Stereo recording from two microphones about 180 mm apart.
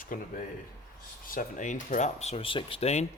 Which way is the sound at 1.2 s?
50° left (ahead or behind).